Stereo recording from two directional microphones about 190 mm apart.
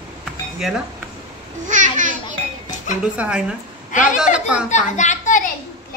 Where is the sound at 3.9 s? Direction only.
40° left (ahead or behind).